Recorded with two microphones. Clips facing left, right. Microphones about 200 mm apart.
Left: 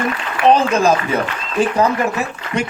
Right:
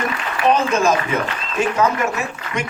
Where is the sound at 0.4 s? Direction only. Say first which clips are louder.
Left 3 dB; 30° left (ahead or behind).